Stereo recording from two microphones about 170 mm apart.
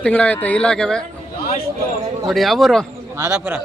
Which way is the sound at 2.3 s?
Centre (ahead or behind).